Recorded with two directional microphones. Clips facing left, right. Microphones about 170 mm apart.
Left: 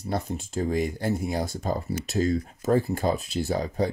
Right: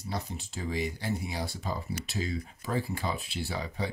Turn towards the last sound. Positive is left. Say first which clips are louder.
# left 8 dB
turn(degrees=45)  # may be behind; listen again after turning